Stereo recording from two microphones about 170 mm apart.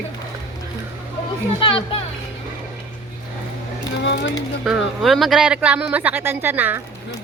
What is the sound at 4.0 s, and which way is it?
Speech, 90° left.